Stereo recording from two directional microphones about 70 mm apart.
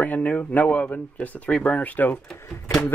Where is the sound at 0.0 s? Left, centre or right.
Left.